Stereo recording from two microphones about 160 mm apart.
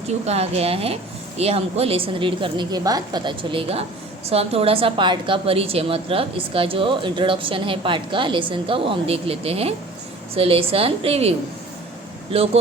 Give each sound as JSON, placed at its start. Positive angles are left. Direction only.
{"t": 0.3, "sound": "a woman's voice", "side_deg": -40}